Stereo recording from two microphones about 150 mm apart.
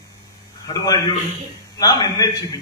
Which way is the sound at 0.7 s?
25° left (ahead or behind).